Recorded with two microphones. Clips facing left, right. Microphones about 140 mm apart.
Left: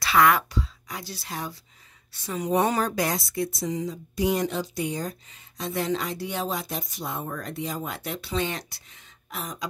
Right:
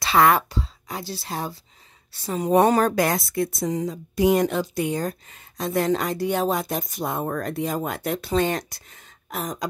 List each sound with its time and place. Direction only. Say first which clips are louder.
0.0 s a woman's voice: right 2 dB; 30° right (ahead or behind)
2.5 s speech: right 6 dB; 55° right (ahead or behind)